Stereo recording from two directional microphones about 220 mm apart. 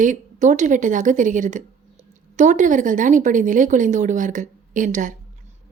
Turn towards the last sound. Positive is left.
turn(degrees=-35)  # may be behind; listen again after turning